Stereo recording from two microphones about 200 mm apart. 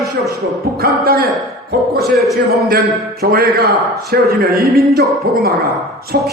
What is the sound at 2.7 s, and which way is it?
A man's voice, 50° right (ahead or behind).